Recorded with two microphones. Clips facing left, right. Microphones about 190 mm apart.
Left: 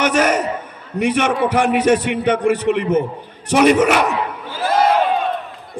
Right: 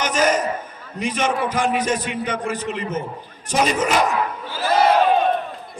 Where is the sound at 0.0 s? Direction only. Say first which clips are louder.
Left 3 dB; 65° left (ahead or behind).